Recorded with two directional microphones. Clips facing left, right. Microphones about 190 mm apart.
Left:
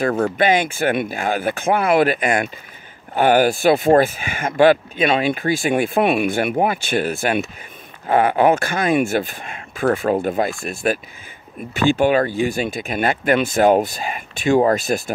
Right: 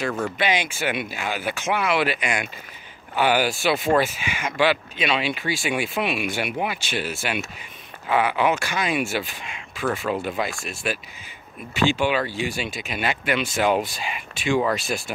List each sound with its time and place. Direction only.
0.0 s speech: 55° left (ahead or behind)